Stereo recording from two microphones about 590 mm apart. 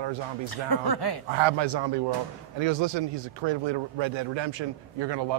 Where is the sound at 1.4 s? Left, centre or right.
Right.